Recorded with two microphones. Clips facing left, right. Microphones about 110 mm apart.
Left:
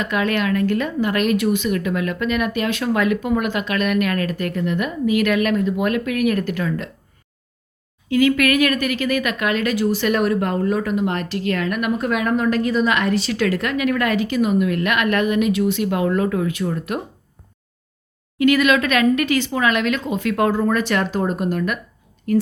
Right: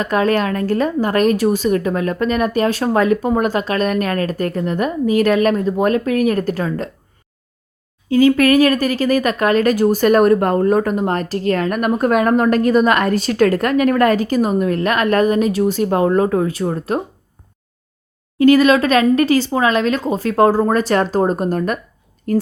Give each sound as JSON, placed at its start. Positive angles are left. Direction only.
{"t": 0.0, "sound": "speech", "side_deg": -35}
{"t": 8.1, "sound": "speech", "side_deg": -30}
{"t": 18.3, "sound": "speech", "side_deg": -35}